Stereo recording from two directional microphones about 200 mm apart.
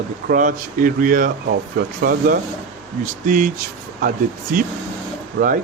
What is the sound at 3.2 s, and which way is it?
Speech, 40° right (ahead or behind).